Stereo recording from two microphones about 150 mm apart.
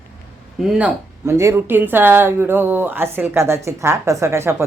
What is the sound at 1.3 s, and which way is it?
Speech, 20° right (ahead or behind).